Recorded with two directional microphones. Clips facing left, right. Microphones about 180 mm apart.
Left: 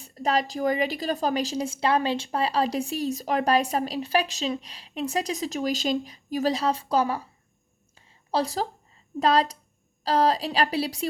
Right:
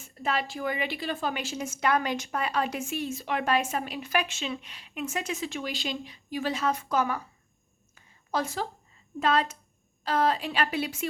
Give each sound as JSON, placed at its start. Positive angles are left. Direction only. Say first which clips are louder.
{"t": 0.0, "sound": "a woman's voice", "louder": "left 5 dB", "side_deg": 40}
{"t": 7.9, "sound": "a sound", "louder": "left 4 dB", "side_deg": 30}
{"t": 9.2, "sound": "a woman's voice", "louder": "left 4 dB", "side_deg": 35}